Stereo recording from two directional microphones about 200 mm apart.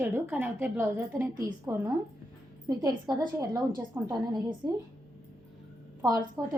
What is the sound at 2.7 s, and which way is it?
A woman's voice, 20° right (ahead or behind).